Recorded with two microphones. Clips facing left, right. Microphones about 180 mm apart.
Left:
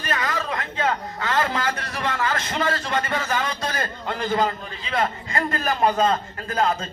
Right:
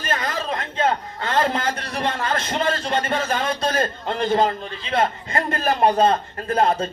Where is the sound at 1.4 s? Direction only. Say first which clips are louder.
Right 4 dB; 30° right (ahead or behind).